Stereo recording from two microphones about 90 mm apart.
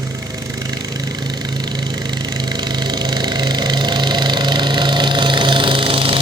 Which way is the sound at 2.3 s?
50° right (ahead or behind).